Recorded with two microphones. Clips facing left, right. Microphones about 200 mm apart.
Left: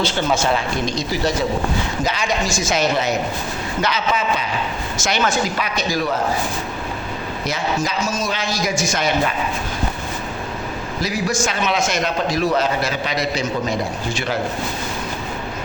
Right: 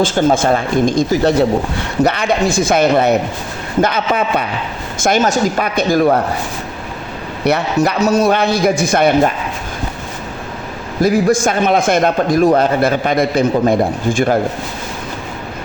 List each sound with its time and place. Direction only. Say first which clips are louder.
0.0 s a man's voice: right 7 dB; 50° right (ahead or behind)
7.4 s a man's voice: right 9 dB; 65° right (ahead or behind)
11.0 s a man's voice: right 10 dB; 55° right (ahead or behind)